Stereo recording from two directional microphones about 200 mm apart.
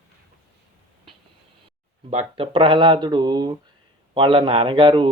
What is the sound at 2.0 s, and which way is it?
Speech, 30° right (ahead or behind).